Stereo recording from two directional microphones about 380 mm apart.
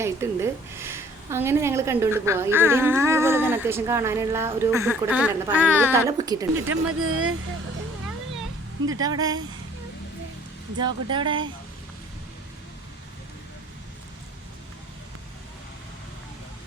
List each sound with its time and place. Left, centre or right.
0.0 s a woman's voice: centre
6.8 s speech: right
9.0 s a woman's voice: centre
10.8 s a woman's voice: centre